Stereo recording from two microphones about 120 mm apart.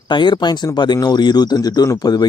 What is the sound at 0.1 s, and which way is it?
Speech, 40° left (ahead or behind).